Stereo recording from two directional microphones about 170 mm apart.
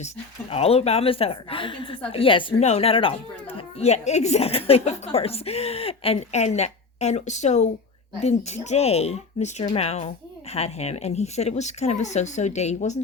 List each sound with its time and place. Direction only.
0.5 s speech: 35° left (ahead or behind)